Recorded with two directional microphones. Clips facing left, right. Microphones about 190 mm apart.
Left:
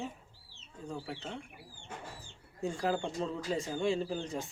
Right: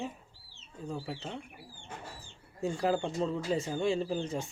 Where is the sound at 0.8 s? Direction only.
5° right (ahead or behind).